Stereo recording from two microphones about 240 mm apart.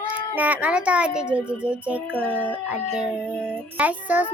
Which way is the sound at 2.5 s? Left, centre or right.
Centre.